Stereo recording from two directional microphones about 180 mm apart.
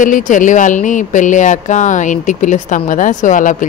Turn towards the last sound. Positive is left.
turn(degrees=45)  # may be behind; listen again after turning